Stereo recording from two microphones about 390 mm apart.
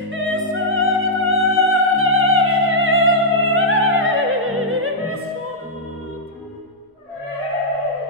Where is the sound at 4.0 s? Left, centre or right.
Right.